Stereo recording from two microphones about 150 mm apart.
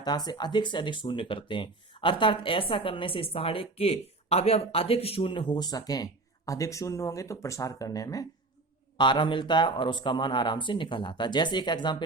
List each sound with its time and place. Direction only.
0.0 s speech: 25° left (ahead or behind)